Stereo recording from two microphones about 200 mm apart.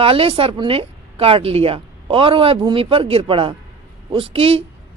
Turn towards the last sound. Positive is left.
turn(degrees=-25)  # may be behind; listen again after turning